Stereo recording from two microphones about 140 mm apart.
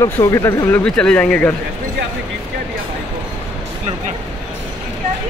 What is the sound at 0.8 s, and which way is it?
Speech, 5° left (ahead or behind).